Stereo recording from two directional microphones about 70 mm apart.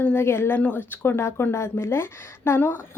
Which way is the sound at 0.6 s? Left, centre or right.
Left.